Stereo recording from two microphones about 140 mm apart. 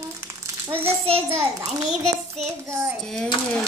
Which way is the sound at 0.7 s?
15° right (ahead or behind).